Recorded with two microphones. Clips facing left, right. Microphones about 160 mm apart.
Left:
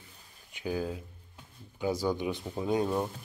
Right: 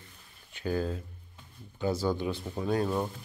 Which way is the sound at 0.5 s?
10° left (ahead or behind).